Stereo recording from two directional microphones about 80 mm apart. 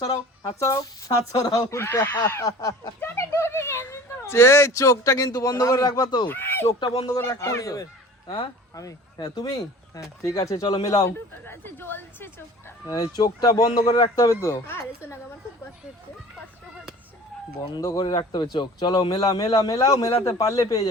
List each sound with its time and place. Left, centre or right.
0.0 s speech: left
1.7 s speech: left
2.4 s speech: left
3.0 s speech: left
6.2 s speech: left
6.7 s speech: left
7.2 s speech: left
11.4 s speech: left
12.9 s a man's voice: left
14.7 s speech: left
17.7 s speech: left
18.0 s a man's voice: left